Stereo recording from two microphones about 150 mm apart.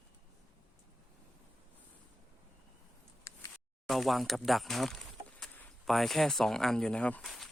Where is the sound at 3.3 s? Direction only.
20° left (ahead or behind).